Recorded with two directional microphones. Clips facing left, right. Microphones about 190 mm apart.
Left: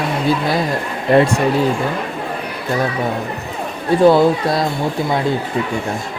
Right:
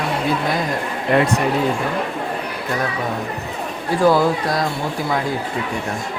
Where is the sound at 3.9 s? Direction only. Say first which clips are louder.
Left 5 dB; 25° left (ahead or behind).